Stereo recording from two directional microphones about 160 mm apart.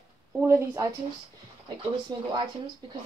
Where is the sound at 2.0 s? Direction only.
30° right (ahead or behind).